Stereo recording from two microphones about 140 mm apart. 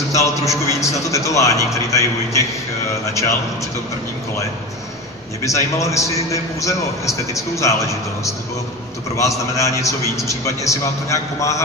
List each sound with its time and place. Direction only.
0.1 s a man's voice: 20° left (ahead or behind)
5.4 s a man's voice: 20° left (ahead or behind)